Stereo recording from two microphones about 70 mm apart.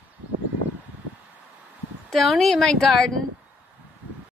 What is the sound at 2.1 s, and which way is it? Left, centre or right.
A woman's voice, centre.